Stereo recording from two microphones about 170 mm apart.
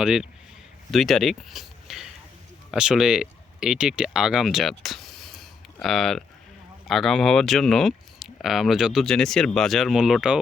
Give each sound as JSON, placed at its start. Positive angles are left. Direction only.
{"t": 0.0, "sound": "speech", "side_deg": -5}